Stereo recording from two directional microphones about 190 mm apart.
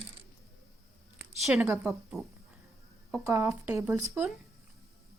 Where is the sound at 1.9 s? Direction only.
Centre (ahead or behind).